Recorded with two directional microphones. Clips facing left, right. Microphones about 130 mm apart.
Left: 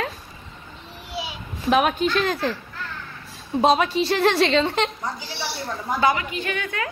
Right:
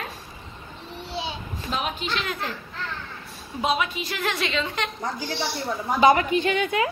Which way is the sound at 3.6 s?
35° left (ahead or behind).